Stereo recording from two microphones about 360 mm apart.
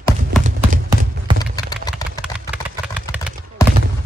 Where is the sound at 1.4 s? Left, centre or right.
Centre.